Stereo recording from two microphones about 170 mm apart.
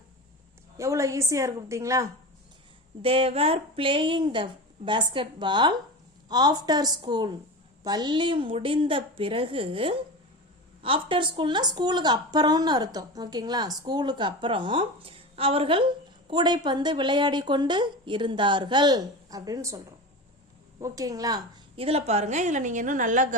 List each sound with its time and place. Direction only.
0.8 s a woman's voice: 15° right (ahead or behind)
3.0 s a woman's voice: 35° right (ahead or behind)
20.8 s a woman's voice: 20° right (ahead or behind)
21.8 s a woman's voice: 35° right (ahead or behind)